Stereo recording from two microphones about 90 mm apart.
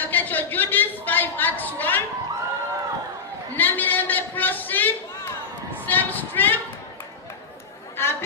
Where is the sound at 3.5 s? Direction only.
20° left (ahead or behind).